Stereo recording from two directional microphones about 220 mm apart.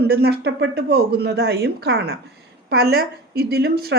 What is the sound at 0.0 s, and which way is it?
A woman's voice, 45° right (ahead or behind).